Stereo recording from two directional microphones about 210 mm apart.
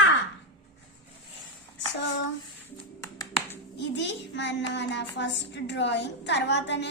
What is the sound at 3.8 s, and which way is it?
A woman's voice, 60° left (ahead or behind).